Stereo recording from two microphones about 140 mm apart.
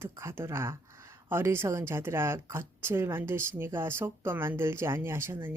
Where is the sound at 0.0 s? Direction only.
20° right (ahead or behind).